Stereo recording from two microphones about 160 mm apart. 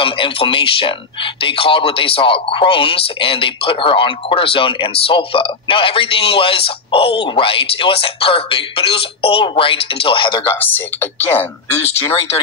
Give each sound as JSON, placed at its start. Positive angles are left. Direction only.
{"t": 0.0, "sound": "speech", "side_deg": 35}
{"t": 10.5, "sound": "speech", "side_deg": 15}